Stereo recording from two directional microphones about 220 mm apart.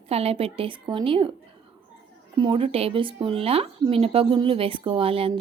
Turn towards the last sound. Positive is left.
turn(degrees=-25)  # may be behind; listen again after turning